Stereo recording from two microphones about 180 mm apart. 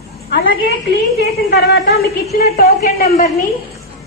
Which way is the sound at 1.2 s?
60° left (ahead or behind).